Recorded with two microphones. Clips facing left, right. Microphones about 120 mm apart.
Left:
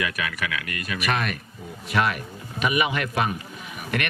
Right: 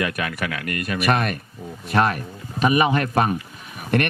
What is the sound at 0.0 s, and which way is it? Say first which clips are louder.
Speech: right 3 dB; 40° right (ahead or behind).